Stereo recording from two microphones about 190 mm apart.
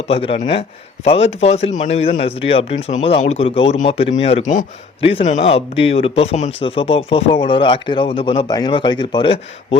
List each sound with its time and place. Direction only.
0.1 s a man's voice: 30° left (ahead or behind)